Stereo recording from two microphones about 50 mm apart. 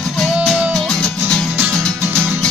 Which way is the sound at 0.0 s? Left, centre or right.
Centre.